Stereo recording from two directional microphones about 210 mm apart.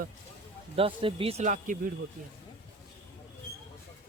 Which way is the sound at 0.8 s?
25° right (ahead or behind).